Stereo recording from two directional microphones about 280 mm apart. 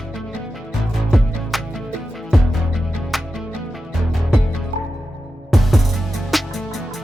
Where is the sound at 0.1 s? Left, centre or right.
Centre.